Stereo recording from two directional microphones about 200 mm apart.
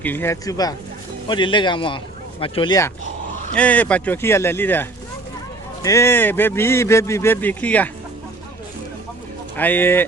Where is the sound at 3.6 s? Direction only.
5° left (ahead or behind).